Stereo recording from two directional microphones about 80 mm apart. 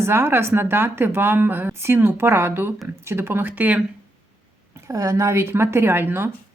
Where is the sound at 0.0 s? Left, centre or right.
Right.